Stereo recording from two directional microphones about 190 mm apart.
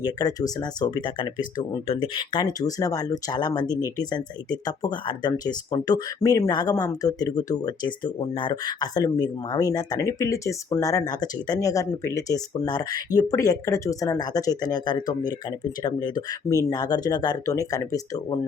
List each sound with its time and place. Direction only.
0.0 s speech: 20° left (ahead or behind)